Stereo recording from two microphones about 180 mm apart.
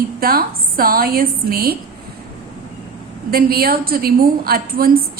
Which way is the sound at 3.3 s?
55° right (ahead or behind).